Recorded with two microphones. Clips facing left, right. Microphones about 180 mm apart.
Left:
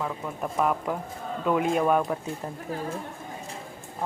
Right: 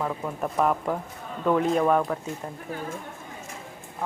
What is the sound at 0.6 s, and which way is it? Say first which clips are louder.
A woman's voice: right 2 dB; centre (ahead or behind).